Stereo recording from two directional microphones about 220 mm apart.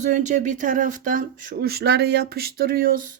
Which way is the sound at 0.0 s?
35° right (ahead or behind).